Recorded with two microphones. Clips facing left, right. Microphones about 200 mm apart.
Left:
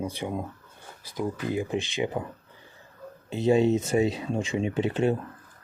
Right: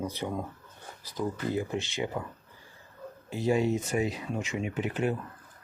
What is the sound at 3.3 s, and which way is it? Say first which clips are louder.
Speech: left 5 dB; 25° left (ahead or behind).